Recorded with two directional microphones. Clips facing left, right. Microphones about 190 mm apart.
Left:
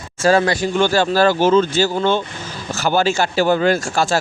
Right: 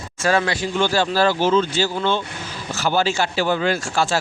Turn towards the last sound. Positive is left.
turn(degrees=45)  # may be behind; listen again after turning